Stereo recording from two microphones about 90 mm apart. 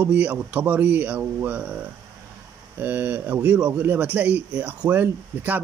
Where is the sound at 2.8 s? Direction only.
20° right (ahead or behind).